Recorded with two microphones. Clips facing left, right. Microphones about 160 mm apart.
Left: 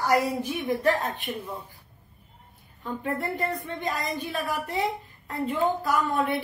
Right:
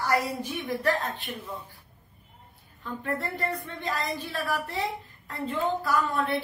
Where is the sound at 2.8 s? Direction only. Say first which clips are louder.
Left 2 dB; 20° left (ahead or behind).